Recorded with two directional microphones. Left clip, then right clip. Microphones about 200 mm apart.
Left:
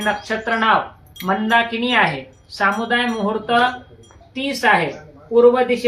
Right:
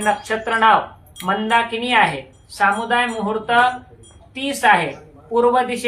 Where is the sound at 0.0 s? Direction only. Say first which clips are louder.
Right 1 dB; 25° right (ahead or behind).